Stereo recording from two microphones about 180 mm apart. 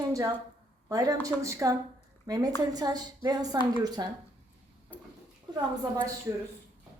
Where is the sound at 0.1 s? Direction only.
20° right (ahead or behind).